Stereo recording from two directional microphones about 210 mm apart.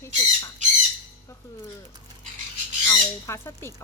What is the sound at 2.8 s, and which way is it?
Speech, 10° left (ahead or behind).